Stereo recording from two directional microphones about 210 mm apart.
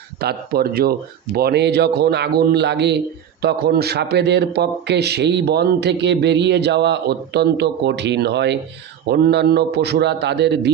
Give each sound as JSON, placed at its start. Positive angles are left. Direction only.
{"t": 0.2, "sound": "a man's voice", "side_deg": -50}